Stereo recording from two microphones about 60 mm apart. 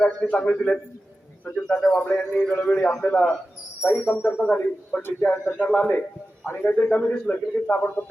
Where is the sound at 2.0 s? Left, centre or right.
Left.